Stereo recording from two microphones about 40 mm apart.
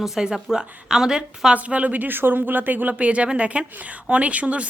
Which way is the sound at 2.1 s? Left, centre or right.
Right.